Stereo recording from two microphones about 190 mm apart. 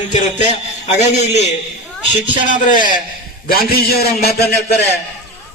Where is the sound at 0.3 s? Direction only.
35° left (ahead or behind).